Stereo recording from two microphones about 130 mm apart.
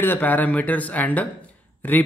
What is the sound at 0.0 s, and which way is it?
A man's voice, 15° left (ahead or behind).